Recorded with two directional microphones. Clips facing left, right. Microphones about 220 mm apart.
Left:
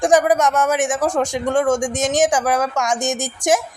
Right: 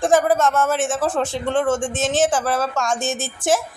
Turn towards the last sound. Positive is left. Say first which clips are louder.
# left 2 dB
turn(degrees=15)  # may be behind; listen again after turning